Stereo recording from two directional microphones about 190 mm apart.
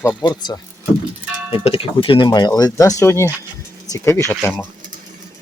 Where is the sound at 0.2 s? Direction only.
20° left (ahead or behind).